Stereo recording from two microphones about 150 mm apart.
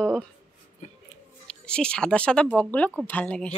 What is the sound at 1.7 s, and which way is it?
A woman's voice, 5° left (ahead or behind).